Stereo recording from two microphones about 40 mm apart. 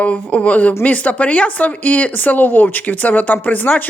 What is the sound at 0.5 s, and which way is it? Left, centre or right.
Speech, left.